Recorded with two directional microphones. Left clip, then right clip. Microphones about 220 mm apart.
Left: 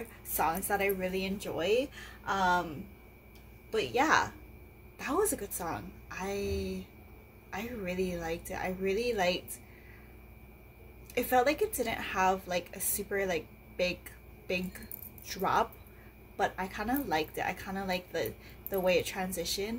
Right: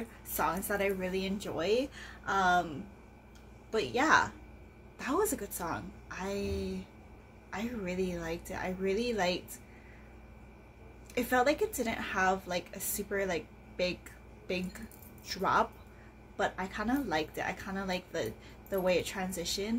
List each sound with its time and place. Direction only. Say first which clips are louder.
0.4 s a woman's voice: left 1 dB; 5° right (ahead or behind)
3.7 s a woman's voice: even; 5° right (ahead or behind)
11.1 s a woman's voice: left 1 dB; 5° right (ahead or behind)
15.2 s a woman's voice: even; 5° right (ahead or behind)